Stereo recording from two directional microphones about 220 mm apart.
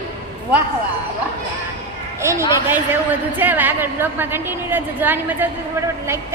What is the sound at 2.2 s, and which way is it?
A woman's voice, 10° right (ahead or behind).